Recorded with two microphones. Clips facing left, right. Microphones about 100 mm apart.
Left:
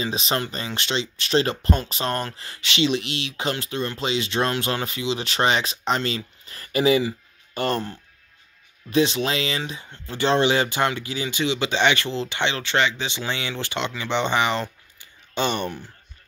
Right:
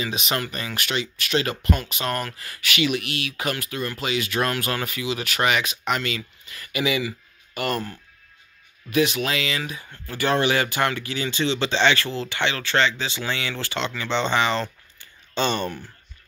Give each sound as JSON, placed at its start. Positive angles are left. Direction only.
{"t": 0.0, "sound": "speech", "side_deg": 30}